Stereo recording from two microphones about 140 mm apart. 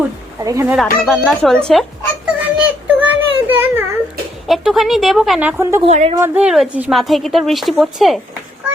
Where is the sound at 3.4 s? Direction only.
15° right (ahead or behind).